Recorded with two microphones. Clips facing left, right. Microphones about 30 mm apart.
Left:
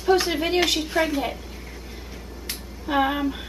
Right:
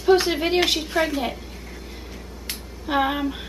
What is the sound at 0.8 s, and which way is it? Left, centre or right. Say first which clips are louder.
Speech: even; centre.